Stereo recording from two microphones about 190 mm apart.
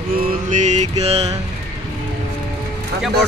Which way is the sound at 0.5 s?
40° right (ahead or behind).